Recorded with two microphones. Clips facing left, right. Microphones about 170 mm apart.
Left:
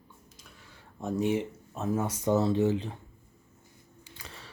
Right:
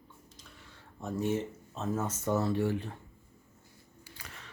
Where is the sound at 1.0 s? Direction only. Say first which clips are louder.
Left 3 dB; 15° left (ahead or behind).